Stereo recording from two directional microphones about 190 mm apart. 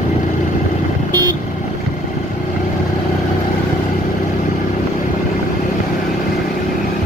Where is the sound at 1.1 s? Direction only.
20° right (ahead or behind).